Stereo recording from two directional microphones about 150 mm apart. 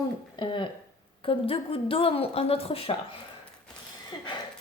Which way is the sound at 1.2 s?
40° left (ahead or behind).